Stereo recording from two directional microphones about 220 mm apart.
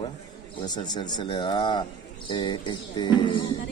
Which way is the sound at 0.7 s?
20° left (ahead or behind).